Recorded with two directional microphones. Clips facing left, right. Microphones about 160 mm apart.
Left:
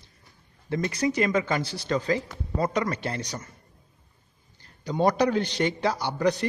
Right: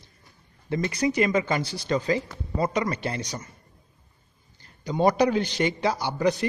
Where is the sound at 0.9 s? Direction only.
5° right (ahead or behind).